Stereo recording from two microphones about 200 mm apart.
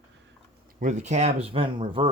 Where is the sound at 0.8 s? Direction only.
35° right (ahead or behind).